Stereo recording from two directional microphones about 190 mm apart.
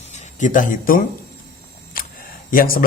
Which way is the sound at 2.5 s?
50° left (ahead or behind).